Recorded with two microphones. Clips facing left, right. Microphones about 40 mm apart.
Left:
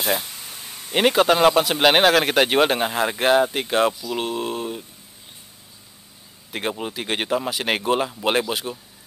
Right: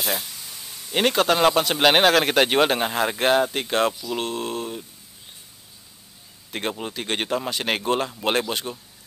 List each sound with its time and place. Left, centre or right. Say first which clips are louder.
0.0 s a sound: left 4 dB; left
0.9 s speech: left 3 dB; centre
6.5 s speech: left 2 dB; centre